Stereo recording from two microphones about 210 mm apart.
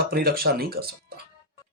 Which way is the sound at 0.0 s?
45° right (ahead or behind).